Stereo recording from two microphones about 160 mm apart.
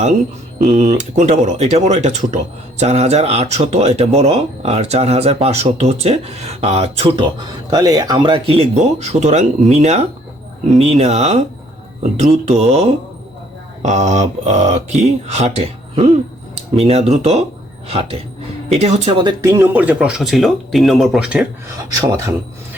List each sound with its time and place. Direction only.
0.6 s speech: 45° right (ahead or behind); by 21.4 s 5° right (ahead or behind)